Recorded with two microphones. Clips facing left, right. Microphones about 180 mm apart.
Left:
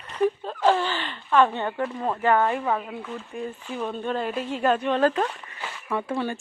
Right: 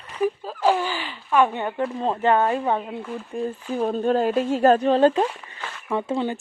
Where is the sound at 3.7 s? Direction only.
40° right (ahead or behind).